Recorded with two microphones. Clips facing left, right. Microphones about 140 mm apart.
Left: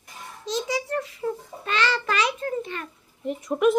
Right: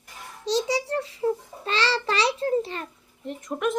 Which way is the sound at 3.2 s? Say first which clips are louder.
Left 6 dB; 5° left (ahead or behind).